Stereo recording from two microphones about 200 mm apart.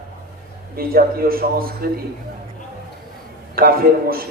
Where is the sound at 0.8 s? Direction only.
45° right (ahead or behind).